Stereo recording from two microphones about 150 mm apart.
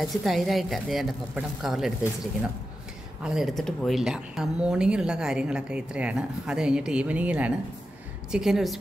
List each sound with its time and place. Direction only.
0.0 s speech: centre (ahead or behind)
3.3 s speech: centre (ahead or behind)